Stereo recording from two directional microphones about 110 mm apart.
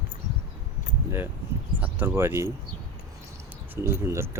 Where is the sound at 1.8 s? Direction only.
15° right (ahead or behind).